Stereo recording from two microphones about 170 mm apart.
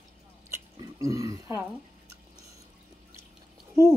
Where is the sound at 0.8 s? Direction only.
20° right (ahead or behind).